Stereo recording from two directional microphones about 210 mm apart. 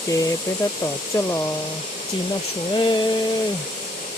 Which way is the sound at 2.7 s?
20° left (ahead or behind).